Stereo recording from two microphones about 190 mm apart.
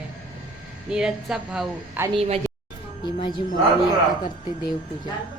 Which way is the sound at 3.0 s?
25° left (ahead or behind).